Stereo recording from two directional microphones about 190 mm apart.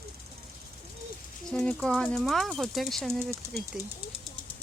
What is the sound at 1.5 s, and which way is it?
Speech, 5° left (ahead or behind).